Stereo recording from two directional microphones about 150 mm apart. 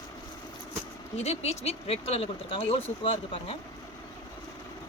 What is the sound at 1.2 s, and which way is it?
Speech, 45° left (ahead or behind).